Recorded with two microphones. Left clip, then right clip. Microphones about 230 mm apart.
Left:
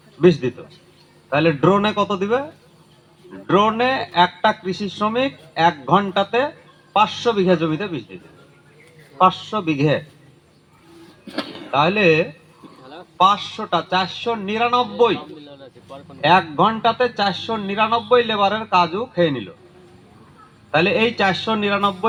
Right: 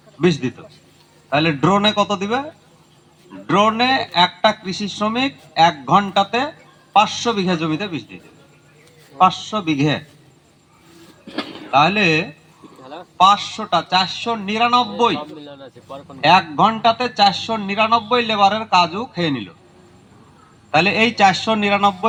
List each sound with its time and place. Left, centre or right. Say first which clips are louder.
0.2 s speech: left 3 dB; right
3.4 s speech: right 1 dB; right
11.3 s a sound: even; left
11.7 s speech: right 1 dB; right
12.8 s a sound: right 4 dB; right
13.1 s speech: right 3 dB; right
15.2 s speech: right 4 dB; right
16.2 s speech: right 2 dB; right
20.7 s speech: right 2 dB; right